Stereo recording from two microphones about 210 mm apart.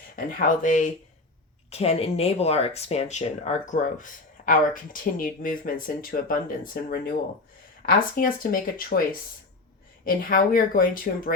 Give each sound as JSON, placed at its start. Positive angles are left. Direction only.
{"t": 0.3, "sound": "speech", "side_deg": 40}
{"t": 10.1, "sound": "speech", "side_deg": 40}